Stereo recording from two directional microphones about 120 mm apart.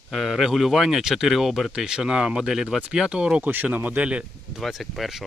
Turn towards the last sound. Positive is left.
turn(degrees=0)  # may be behind; listen again after turning